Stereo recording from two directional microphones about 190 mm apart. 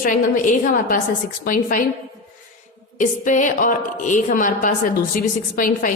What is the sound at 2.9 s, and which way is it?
A woman's voice, 40° left (ahead or behind).